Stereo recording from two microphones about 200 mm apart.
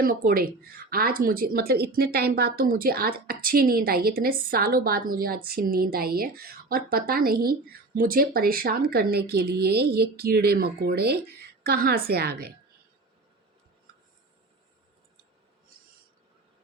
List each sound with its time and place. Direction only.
0.0 s a woman's voice: 45° right (ahead or behind)